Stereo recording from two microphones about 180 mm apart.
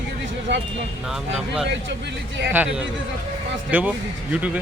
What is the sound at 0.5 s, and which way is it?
Speech, 85° right.